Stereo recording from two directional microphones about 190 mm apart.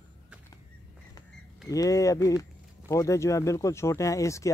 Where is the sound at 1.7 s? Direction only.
15° left (ahead or behind).